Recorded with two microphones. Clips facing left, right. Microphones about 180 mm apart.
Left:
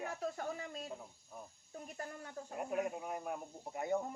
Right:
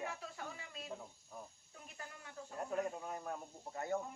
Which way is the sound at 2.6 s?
10° left (ahead or behind).